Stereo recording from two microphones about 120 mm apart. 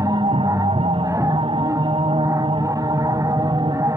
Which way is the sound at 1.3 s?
45° right (ahead or behind).